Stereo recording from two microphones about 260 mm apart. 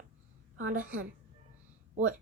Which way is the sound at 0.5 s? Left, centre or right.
Right.